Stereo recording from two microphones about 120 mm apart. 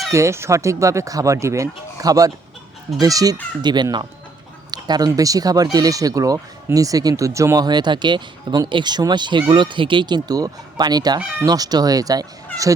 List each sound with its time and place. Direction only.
0.1 s speech: 25° right (ahead or behind)